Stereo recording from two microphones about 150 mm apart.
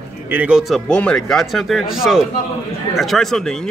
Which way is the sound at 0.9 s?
5° left (ahead or behind).